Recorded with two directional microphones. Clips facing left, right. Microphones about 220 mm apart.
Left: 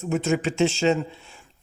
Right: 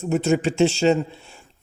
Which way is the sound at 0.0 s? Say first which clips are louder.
Right 3 dB; 35° right (ahead or behind).